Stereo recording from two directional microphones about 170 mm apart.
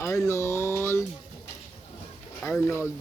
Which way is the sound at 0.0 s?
15° left (ahead or behind).